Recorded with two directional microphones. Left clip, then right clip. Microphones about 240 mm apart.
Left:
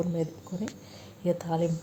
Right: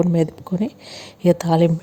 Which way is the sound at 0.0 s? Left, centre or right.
Right.